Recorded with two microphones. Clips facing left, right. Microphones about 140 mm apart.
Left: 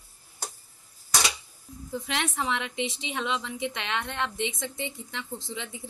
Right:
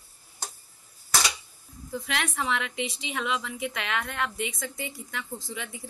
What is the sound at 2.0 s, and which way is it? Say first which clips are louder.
A woman's voice: even; 25° left (ahead or behind).